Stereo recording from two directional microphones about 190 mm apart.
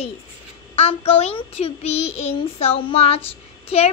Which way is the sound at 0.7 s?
30° left (ahead or behind).